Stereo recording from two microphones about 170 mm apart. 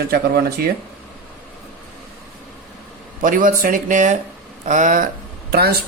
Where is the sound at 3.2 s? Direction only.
50° right (ahead or behind).